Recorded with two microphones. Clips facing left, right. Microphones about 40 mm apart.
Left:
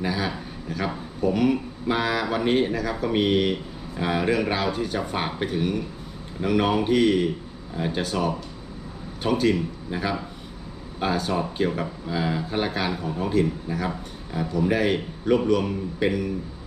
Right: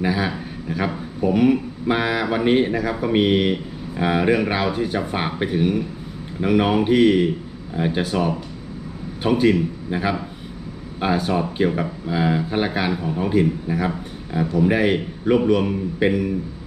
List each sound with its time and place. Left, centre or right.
0.0 s a man's voice: centre